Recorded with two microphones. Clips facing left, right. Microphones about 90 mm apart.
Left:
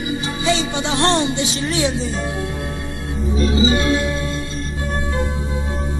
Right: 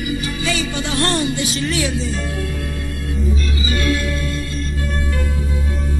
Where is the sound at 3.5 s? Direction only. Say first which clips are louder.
Left 5 dB; 20° left (ahead or behind).